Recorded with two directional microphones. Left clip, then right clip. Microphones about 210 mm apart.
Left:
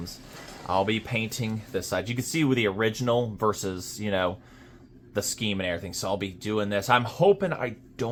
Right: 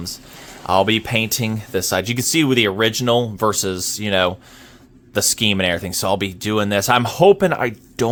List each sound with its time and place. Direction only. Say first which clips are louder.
0.7 s speech: right 10 dB; 55° right (ahead or behind); by 4.4 s 40° right (ahead or behind)
5.1 s speech: right 11 dB; 55° right (ahead or behind)